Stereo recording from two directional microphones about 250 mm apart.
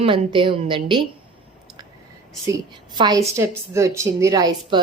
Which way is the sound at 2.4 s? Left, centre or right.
Centre.